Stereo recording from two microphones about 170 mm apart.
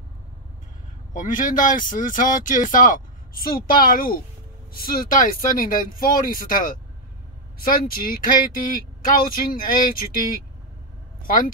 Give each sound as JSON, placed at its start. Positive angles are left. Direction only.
{"t": 1.1, "sound": "speech", "side_deg": 50}